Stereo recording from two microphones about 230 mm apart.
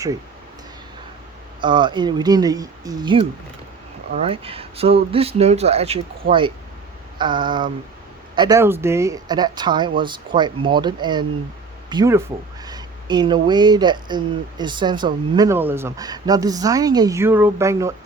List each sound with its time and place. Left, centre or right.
1.6 s speech: centre